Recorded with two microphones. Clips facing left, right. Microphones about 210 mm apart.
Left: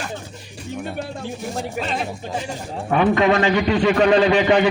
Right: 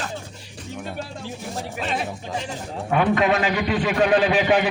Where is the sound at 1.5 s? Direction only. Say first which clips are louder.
Left 1 dB; centre (ahead or behind).